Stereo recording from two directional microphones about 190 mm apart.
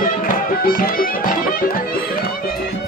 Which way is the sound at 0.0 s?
45° left (ahead or behind).